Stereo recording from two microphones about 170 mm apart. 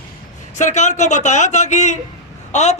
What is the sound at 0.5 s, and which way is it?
A man's voice, 45° left (ahead or behind).